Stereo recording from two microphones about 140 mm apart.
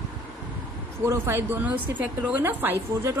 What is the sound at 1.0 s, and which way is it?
A woman's voice, 20° right (ahead or behind).